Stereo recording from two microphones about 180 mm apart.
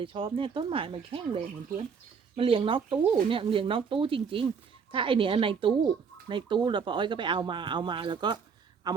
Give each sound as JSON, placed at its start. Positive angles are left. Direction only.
{"t": 0.0, "sound": "speech", "side_deg": -30}